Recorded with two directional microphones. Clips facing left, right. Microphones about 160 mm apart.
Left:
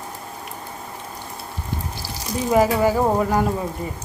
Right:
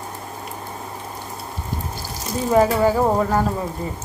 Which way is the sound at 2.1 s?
15° left (ahead or behind).